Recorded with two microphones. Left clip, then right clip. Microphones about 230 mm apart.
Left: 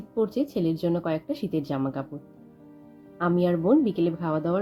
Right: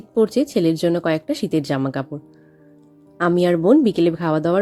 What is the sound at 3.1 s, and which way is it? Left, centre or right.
Speech, right.